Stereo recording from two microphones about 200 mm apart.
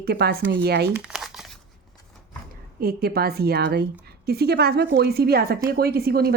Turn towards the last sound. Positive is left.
turn(degrees=-50)  # may be behind; listen again after turning